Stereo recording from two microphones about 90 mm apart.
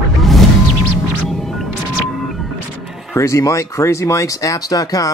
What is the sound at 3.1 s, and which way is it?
Speech, 35° left (ahead or behind).